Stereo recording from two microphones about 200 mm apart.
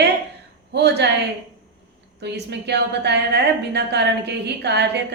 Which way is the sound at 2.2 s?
55° right (ahead or behind).